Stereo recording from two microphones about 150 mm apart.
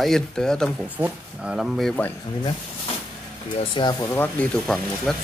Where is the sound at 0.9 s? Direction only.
10° right (ahead or behind).